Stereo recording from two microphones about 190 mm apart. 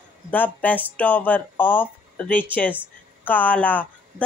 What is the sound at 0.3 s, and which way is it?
A woman's voice, 10° left (ahead or behind).